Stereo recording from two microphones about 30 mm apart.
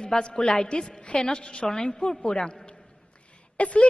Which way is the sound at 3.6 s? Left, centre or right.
Left.